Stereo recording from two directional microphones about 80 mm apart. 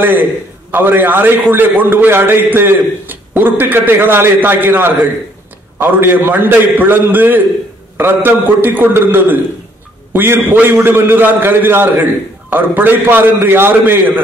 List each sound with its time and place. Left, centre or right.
0.7 s a man's voice: right